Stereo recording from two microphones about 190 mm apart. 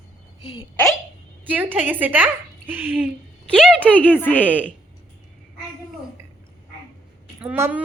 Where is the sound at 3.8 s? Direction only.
10° left (ahead or behind).